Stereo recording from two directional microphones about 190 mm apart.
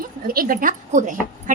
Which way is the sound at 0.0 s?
50° right (ahead or behind).